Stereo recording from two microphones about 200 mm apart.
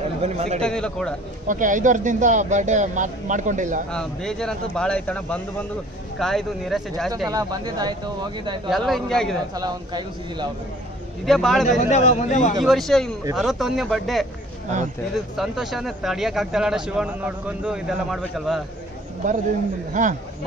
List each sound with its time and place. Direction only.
0.2 s speech: 35° right (ahead or behind)
0.6 s speech: 5° left (ahead or behind)
1.5 s speech: 40° right (ahead or behind)
3.9 s speech: 5° left (ahead or behind)
7.2 s a man's voice: 20° right (ahead or behind)
8.6 s speech: centre (ahead or behind)
9.6 s a man's voice: 20° right (ahead or behind)
11.2 s speech: centre (ahead or behind)
11.8 s a man's voice: 35° left (ahead or behind)
12.6 s speech: centre (ahead or behind)
19.9 s speech: 40° right (ahead or behind)